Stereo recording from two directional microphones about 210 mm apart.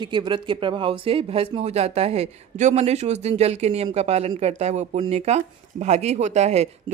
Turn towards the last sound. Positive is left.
turn(degrees=-30)  # may be behind; listen again after turning